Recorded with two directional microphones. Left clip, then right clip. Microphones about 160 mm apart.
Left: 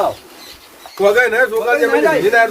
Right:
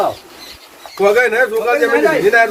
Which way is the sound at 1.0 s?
Centre (ahead or behind).